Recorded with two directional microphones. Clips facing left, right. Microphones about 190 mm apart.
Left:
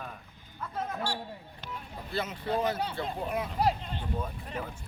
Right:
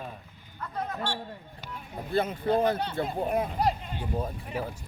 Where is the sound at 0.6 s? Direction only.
5° left (ahead or behind).